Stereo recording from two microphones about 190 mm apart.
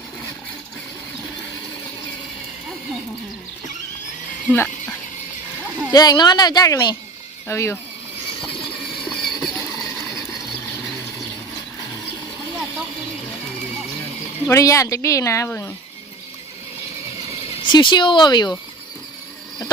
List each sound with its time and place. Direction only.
4.5 s a woman's voice: 10° left (ahead or behind)
9.0 s vehicle: centre (ahead or behind)
9.6 s a sound: 20° left (ahead or behind)
14.4 s speech: 15° left (ahead or behind)
17.2 s speech: 30° left (ahead or behind)